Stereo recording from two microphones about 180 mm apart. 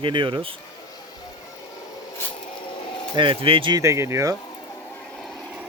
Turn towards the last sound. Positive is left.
turn(degrees=0)  # may be behind; listen again after turning